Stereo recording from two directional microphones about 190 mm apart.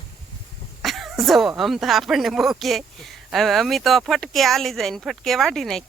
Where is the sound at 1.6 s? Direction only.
Centre (ahead or behind).